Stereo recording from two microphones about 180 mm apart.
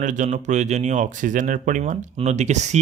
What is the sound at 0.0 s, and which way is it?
Speech, 40° right (ahead or behind).